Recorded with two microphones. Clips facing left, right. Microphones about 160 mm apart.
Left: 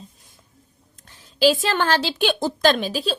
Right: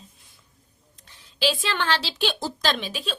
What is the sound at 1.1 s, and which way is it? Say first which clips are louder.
A woman's voice: left 8 dB; 40° left (ahead or behind).